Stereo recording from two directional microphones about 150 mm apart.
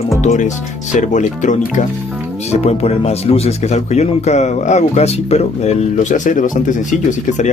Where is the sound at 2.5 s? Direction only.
45° left (ahead or behind).